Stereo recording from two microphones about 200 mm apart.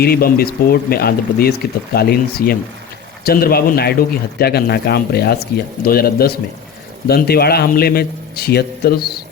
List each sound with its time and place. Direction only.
0.0 s speech: 50° left (ahead or behind)